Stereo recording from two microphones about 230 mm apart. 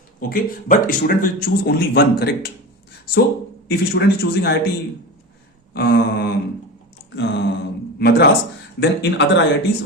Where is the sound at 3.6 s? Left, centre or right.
Left.